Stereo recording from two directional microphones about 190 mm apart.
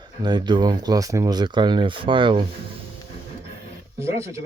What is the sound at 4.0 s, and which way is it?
Wild animals, 15° right (ahead or behind).